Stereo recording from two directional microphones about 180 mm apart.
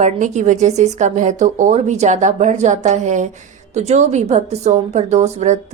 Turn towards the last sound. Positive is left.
turn(degrees=-40)  # may be behind; listen again after turning